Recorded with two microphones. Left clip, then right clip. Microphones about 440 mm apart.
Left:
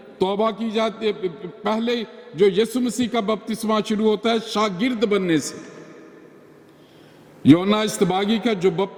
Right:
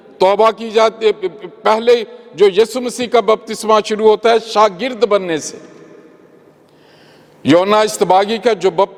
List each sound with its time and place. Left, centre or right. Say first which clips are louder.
0.2 s a man's voice: right 10 dB; right
7.4 s a man's voice: right 7 dB; right